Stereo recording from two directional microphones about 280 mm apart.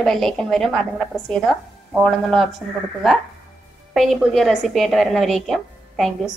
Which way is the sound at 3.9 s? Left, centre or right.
Centre.